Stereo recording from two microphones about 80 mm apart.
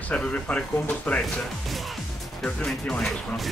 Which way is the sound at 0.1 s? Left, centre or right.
Centre.